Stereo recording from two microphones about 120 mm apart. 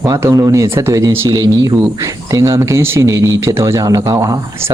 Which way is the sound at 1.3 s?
35° right (ahead or behind).